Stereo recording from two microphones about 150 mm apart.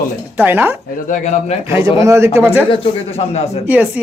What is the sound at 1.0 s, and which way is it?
Speech, 55° left (ahead or behind).